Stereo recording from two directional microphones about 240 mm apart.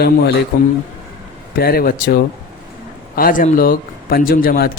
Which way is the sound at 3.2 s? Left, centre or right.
Left.